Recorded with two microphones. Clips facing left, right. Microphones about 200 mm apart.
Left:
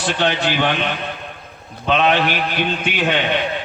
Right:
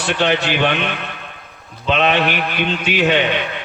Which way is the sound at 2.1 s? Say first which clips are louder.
Right 1 dB; 60° right (ahead or behind).